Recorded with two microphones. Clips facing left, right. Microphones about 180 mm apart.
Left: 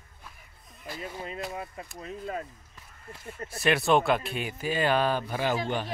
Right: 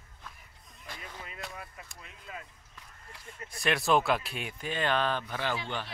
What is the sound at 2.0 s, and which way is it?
Speech, 45° left (ahead or behind).